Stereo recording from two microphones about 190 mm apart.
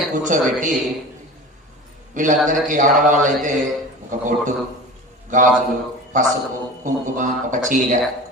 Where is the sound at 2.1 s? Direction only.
40° right (ahead or behind).